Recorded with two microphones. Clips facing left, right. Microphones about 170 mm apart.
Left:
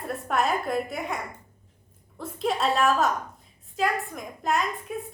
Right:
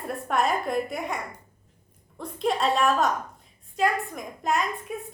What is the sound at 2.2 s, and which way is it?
A woman's voice, centre (ahead or behind).